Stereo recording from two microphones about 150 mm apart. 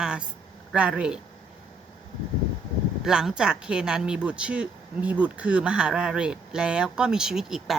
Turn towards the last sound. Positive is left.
turn(degrees=0)  # may be behind; listen again after turning